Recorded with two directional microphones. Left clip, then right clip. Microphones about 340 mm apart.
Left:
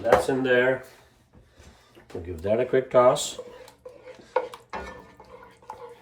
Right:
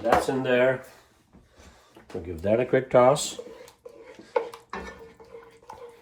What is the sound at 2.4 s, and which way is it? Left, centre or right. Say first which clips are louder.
Speech: even; centre.